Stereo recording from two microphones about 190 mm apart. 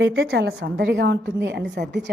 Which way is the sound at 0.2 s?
55° right (ahead or behind).